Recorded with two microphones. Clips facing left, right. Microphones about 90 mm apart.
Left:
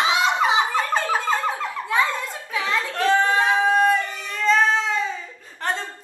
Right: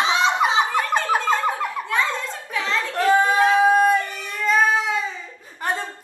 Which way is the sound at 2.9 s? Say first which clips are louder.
Right 2 dB; 15° right (ahead or behind).